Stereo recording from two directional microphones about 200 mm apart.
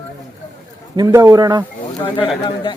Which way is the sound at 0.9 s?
20° right (ahead or behind).